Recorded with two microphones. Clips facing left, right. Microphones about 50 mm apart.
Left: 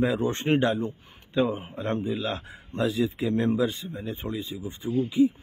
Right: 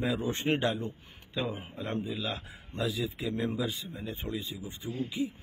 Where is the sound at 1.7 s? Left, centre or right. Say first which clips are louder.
Left 6 dB; left.